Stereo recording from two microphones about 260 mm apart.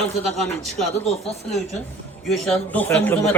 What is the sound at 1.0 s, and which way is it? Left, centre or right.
Speech, left.